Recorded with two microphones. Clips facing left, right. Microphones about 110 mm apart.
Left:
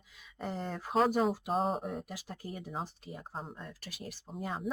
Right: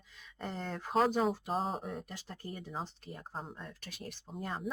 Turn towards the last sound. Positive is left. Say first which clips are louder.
# left 2 dB
turn(degrees=0)  # may be behind; listen again after turning